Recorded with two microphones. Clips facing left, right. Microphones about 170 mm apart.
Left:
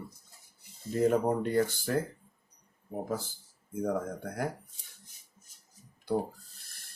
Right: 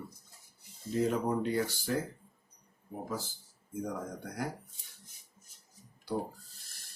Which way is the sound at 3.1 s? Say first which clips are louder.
Left 4 dB; 55° left (ahead or behind).